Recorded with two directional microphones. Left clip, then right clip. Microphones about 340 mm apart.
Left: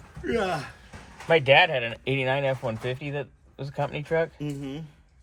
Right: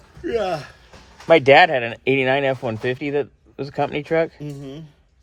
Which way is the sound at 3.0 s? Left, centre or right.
Right.